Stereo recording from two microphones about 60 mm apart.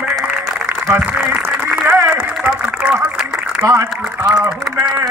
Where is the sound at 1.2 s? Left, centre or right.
Right.